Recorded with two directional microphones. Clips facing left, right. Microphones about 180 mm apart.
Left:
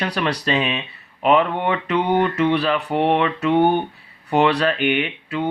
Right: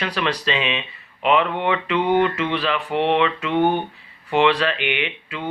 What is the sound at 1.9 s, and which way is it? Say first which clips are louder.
Speech: even; 40° left (ahead or behind).